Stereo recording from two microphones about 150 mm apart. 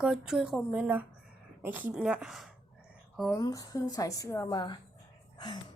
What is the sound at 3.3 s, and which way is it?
Speech, 25° left (ahead or behind).